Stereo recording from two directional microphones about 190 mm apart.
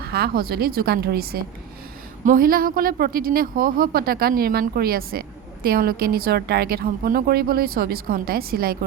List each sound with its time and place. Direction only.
0.0 s a woman's voice: 55° right (ahead or behind)